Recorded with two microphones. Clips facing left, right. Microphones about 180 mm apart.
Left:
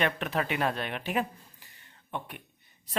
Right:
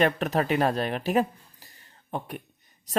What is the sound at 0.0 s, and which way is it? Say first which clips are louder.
Speech: right 6 dB; 40° right (ahead or behind).